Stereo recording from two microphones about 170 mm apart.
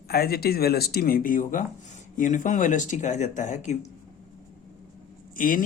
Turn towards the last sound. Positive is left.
turn(degrees=55)  # may be behind; listen again after turning